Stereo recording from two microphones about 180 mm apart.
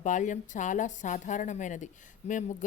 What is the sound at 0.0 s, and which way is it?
A woman's voice, 45° left (ahead or behind).